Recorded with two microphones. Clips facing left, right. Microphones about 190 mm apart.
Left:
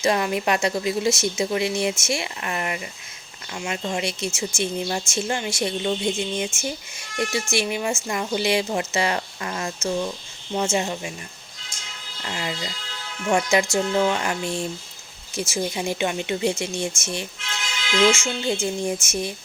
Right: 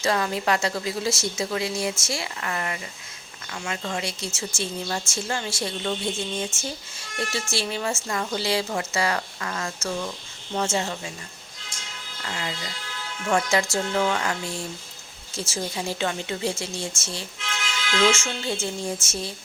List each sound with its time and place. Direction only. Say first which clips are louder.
0.0 s speech: left 3 dB; 20° left (ahead or behind)
12.2 s speech: left 3 dB; 20° left (ahead or behind)